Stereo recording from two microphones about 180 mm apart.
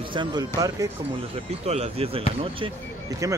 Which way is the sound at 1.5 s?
35° right (ahead or behind).